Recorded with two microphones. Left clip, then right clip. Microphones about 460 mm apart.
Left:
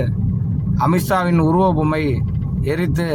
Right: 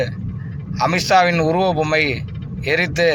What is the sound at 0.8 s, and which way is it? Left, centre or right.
Speech, left.